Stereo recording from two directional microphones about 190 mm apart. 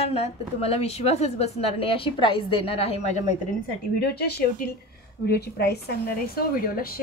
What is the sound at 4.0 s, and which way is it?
A woman's voice, 55° left (ahead or behind).